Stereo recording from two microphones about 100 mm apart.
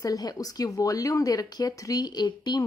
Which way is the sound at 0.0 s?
40° left (ahead or behind).